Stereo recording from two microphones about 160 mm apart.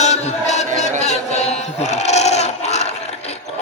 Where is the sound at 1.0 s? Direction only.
45° left (ahead or behind).